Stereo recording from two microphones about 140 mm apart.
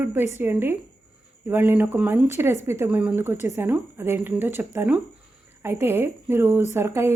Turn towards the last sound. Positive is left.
turn(degrees=-20)  # may be behind; listen again after turning